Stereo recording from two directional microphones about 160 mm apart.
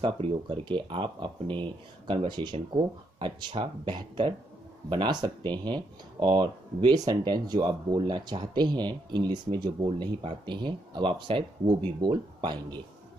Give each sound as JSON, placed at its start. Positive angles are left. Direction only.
{"t": 0.0, "sound": "speech", "side_deg": -30}